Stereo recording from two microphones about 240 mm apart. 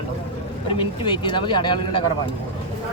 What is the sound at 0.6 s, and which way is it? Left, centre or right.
Speech, left.